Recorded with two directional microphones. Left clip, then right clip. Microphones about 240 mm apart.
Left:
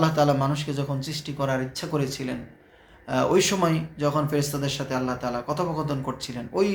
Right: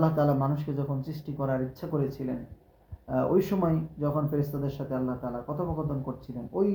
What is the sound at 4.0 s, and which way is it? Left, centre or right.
Speech, centre.